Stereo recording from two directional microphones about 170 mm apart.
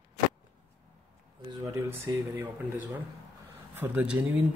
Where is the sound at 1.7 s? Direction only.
15° right (ahead or behind).